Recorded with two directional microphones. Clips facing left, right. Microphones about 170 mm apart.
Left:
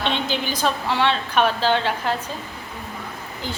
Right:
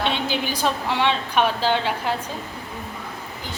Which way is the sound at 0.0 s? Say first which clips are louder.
Even; 10° right (ahead or behind).